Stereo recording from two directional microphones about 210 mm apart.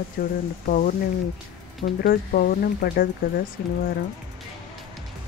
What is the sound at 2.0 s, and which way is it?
Speech, 45° left (ahead or behind).